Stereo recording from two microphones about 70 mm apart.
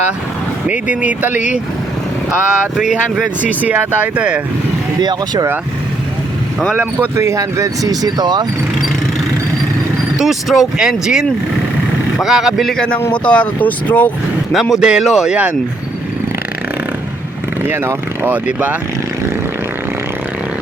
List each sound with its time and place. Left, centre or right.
0.7 s speech: right
2.7 s speech: centre
4.9 s speech: right
7.2 s speech: right
10.2 s speech: centre
12.7 s speech: centre
14.5 s speech: centre
17.7 s speech: right
18.4 s speech: right